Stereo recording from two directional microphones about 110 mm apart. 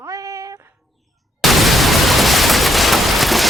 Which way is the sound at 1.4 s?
Centre (ahead or behind).